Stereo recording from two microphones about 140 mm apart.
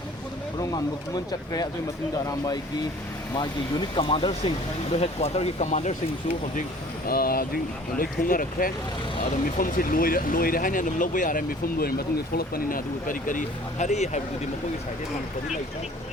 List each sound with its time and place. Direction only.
0.6 s speech: 25° left (ahead or behind)
3.3 s speech: 30° left (ahead or behind); by 5.9 s 55° left (ahead or behind)
7.1 s speech: 90° left; by 14.2 s 55° left (ahead or behind)